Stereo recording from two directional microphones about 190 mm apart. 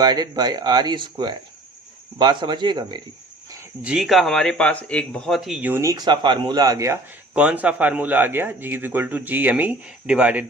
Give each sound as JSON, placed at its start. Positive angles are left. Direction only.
{"t": 0.0, "sound": "speech", "side_deg": -20}
{"t": 3.8, "sound": "speech", "side_deg": 0}